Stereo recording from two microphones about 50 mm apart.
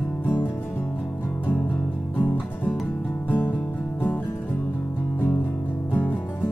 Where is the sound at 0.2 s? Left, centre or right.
Left.